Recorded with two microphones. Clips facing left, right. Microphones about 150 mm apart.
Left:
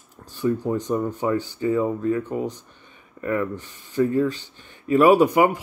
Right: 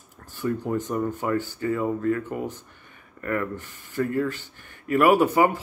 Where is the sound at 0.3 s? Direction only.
20° left (ahead or behind).